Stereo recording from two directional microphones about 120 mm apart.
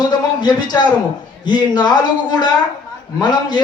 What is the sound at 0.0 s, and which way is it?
A man's voice, 35° left (ahead or behind).